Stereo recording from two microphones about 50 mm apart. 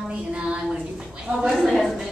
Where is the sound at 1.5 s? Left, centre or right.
Centre.